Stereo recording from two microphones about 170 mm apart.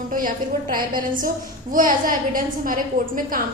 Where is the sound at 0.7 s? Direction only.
55° right (ahead or behind).